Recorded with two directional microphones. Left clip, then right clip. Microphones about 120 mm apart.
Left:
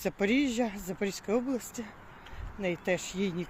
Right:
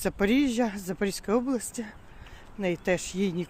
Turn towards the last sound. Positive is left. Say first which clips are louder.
# right 3 dB
turn(degrees=-55)  # may be behind; listen again after turning